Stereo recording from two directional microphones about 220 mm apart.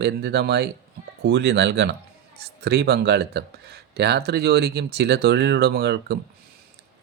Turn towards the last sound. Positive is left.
turn(degrees=-50)  # may be behind; listen again after turning